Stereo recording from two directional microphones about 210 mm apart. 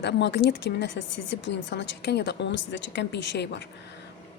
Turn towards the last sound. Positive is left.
turn(degrees=55)  # may be behind; listen again after turning